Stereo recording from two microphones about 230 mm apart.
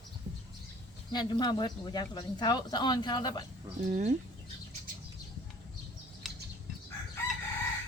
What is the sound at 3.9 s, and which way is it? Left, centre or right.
Speech, right.